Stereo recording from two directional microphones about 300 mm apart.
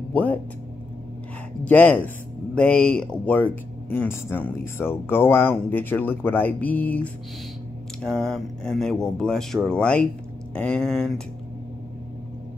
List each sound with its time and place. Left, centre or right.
0.1 s speech: centre
1.6 s speech: centre